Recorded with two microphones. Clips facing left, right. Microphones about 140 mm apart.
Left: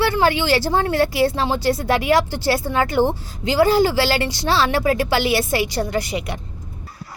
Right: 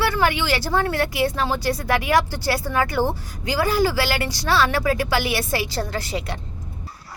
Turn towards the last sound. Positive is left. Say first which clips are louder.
# left 4 dB
turn(degrees=15)  # may be behind; listen again after turning